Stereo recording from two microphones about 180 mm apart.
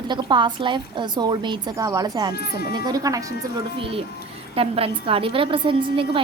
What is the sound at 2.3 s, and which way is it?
Speech, 60° left (ahead or behind).